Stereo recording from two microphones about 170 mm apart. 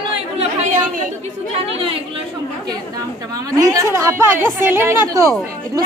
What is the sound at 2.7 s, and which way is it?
A woman's voice, 20° right (ahead or behind).